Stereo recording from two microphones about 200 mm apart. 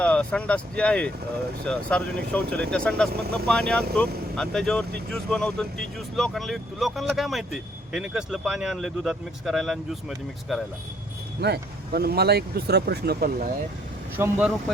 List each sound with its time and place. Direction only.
0.0 s speech: 5° left (ahead or behind)
11.3 s speech: 55° right (ahead or behind)
14.2 s speech: 10° right (ahead or behind)